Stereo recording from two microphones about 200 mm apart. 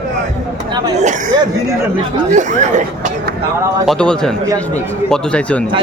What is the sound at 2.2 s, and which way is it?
Speech, 35° right (ahead or behind).